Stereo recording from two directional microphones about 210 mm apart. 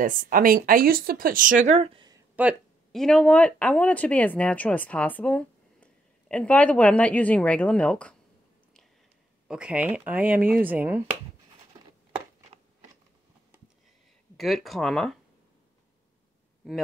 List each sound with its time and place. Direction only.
0.0 s speech: 40° right (ahead or behind)
2.3 s speech: 5° right (ahead or behind)
9.5 s speech: 5° right (ahead or behind)
14.3 s speech: centre (ahead or behind)